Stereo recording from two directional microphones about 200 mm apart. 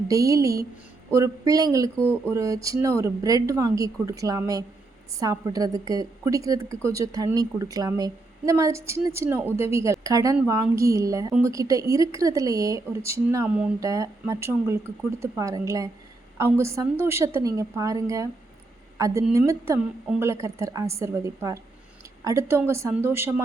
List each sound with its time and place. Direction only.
0.1 s a woman's voice: 15° right (ahead or behind)